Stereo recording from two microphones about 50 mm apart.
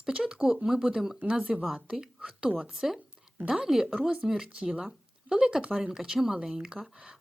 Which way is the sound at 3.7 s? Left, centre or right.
Centre.